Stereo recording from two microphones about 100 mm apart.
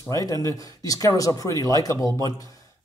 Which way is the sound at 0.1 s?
35° left (ahead or behind).